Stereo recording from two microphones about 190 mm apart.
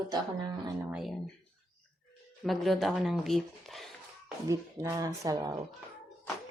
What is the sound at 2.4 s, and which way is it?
Speech, centre (ahead or behind).